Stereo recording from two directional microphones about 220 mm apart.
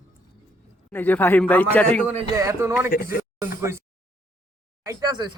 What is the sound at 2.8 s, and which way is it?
Speech, 40° left (ahead or behind).